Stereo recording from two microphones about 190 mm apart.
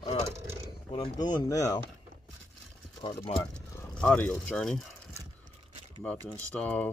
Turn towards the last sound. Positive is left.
turn(degrees=5)  # may be behind; listen again after turning